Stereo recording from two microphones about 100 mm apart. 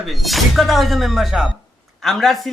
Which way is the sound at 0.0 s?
Centre (ahead or behind).